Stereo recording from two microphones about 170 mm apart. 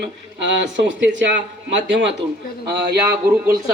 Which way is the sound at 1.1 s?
90° right.